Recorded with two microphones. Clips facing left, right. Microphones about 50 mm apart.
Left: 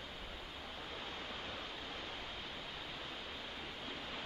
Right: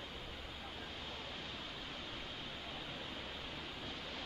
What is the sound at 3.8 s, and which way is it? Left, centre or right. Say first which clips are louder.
Waves: left 1 dB; centre.